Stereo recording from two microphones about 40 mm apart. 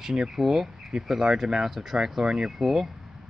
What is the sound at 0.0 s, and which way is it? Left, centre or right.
Speech, centre.